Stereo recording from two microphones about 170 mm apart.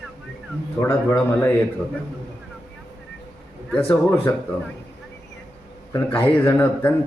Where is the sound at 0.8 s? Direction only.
15° left (ahead or behind).